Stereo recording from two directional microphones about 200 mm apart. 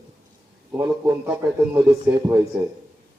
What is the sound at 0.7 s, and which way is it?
A man's voice, 10° right (ahead or behind).